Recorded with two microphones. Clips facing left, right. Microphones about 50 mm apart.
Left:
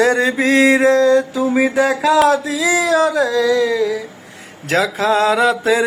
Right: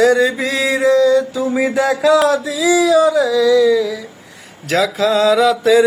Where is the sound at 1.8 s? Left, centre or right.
Left.